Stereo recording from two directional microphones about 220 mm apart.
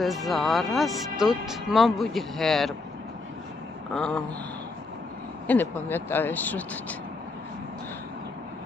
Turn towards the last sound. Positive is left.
turn(degrees=5)  # may be behind; listen again after turning